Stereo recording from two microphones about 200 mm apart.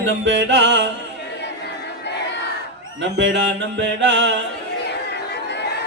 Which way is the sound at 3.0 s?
65° right (ahead or behind).